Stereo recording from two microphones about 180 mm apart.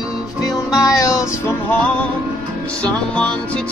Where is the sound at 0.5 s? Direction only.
20° left (ahead or behind).